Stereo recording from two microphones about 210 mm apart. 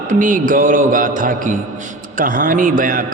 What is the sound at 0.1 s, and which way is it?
A man's voice, 40° right (ahead or behind).